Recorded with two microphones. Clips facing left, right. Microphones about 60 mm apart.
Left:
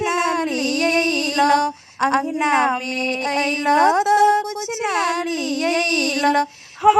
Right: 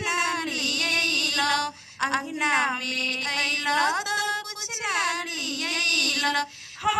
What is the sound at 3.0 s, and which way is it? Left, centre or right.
Music, left.